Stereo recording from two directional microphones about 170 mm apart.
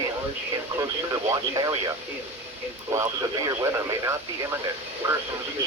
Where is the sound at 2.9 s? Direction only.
20° right (ahead or behind).